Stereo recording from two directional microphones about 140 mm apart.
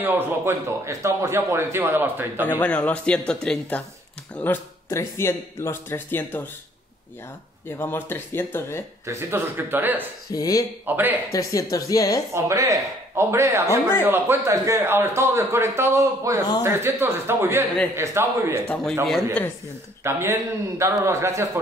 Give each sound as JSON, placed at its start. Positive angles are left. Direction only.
{"t": 0.0, "sound": "speech", "side_deg": -15}
{"t": 2.6, "sound": "speech", "side_deg": 10}
{"t": 7.7, "sound": "speech", "side_deg": 15}
{"t": 9.0, "sound": "speech", "side_deg": -20}
{"t": 10.3, "sound": "a woman's voice", "side_deg": 25}
{"t": 10.9, "sound": "speech", "side_deg": -15}
{"t": 11.3, "sound": "a woman's voice", "side_deg": 25}
{"t": 12.4, "sound": "a man's voice", "side_deg": -20}
{"t": 13.7, "sound": "speech", "side_deg": 15}
{"t": 14.0, "sound": "a man's voice", "side_deg": -15}
{"t": 20.0, "sound": "a man's voice", "side_deg": -20}